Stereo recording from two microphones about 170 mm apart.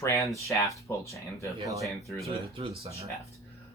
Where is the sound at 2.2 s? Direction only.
35° right (ahead or behind).